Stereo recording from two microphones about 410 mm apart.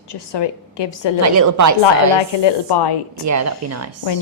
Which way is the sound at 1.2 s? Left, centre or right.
Right.